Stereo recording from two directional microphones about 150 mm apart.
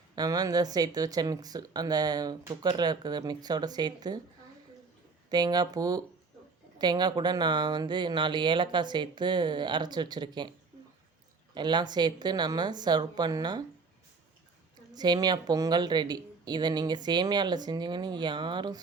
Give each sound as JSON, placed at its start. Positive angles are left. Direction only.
{"t": 0.2, "sound": "speech", "side_deg": -25}
{"t": 5.3, "sound": "speech", "side_deg": -25}
{"t": 11.5, "sound": "speech", "side_deg": -30}
{"t": 14.9, "sound": "speech", "side_deg": -25}